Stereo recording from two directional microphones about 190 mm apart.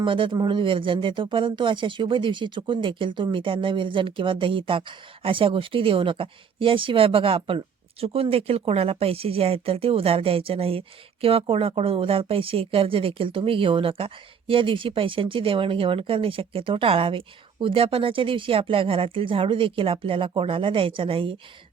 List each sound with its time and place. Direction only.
0.0 s speech: 25° right (ahead or behind)